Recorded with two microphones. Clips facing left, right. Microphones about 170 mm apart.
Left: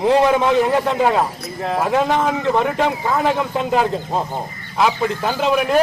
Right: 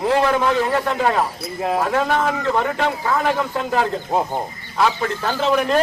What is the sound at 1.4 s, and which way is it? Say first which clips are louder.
Speech: right 1 dB; 10° right (ahead or behind).